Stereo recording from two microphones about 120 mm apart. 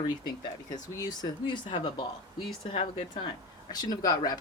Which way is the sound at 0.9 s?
35° left (ahead or behind).